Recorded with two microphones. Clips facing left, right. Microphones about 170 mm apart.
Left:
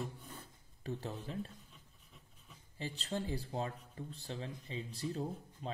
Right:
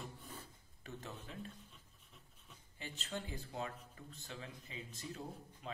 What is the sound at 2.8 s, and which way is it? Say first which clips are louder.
Speech: left 6 dB; 35° left (ahead or behind).